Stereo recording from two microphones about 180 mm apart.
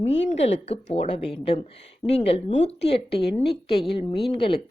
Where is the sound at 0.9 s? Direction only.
35° left (ahead or behind).